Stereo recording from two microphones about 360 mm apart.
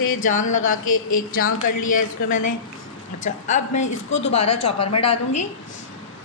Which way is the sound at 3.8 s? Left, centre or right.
Left.